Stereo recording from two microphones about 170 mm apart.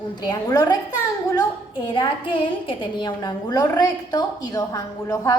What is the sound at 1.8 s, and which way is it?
A woman's voice, 25° left (ahead or behind).